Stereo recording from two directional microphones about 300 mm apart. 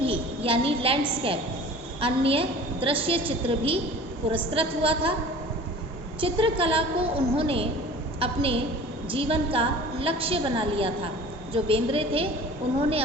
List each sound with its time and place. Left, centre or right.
0.0 s a sound: centre
2.0 s a woman's voice: centre
6.1 s a woman's voice: centre